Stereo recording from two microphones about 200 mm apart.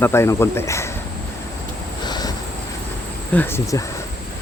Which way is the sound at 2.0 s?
20° left (ahead or behind).